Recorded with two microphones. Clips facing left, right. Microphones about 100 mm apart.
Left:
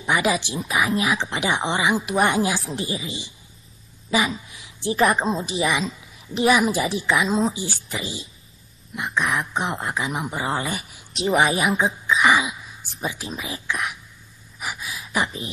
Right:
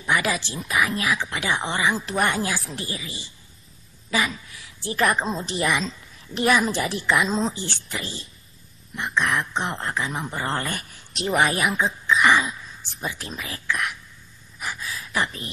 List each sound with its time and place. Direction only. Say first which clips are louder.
0.0 s speech: left 2 dB; 15° left (ahead or behind)
0.6 s a woman's voice: left 1 dB; centre (ahead or behind)
0.9 s a woman's voice: left 3 dB; 20° left (ahead or behind)
4.9 s a woman's voice: left 3 dB; centre (ahead or behind)
12.1 s throat clearing: even; 5° left (ahead or behind)
12.9 s a woman's voice: left 3 dB; centre (ahead or behind)
13.7 s speech: right 1 dB; 15° left (ahead or behind)
14.6 s gasp: even; 15° left (ahead or behind)
15.2 s a woman's voice: left 2 dB; centre (ahead or behind)